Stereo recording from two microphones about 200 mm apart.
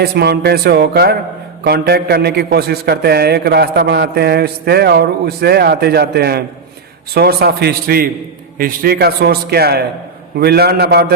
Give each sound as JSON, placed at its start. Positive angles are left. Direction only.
{"t": 0.0, "sound": "a man's voice", "side_deg": -55}